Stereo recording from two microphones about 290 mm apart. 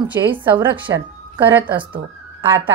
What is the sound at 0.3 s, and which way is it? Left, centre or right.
Speech, centre.